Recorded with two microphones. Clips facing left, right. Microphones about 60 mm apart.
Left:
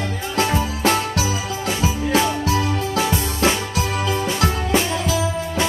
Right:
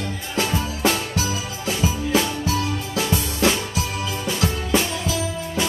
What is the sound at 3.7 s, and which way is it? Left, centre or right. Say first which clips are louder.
Music: left 5 dB; left.